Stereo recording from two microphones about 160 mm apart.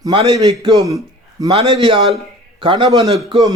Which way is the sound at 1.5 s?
35° right (ahead or behind).